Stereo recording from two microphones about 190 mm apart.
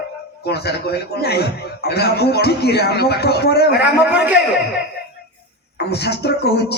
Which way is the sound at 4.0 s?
10° right (ahead or behind).